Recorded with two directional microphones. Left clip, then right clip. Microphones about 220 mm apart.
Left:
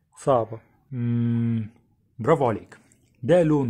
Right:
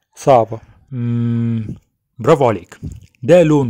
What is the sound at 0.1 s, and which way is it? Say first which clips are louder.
Speech: right 10 dB; 25° right (ahead or behind).